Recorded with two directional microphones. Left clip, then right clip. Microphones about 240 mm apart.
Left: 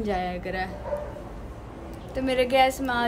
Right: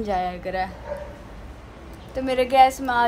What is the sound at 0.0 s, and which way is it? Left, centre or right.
Speech, centre.